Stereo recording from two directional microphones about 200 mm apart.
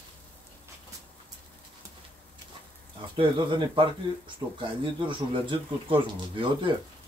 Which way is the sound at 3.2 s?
25° right (ahead or behind).